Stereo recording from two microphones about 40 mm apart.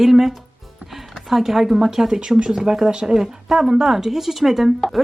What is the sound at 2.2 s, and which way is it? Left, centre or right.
Speech, right.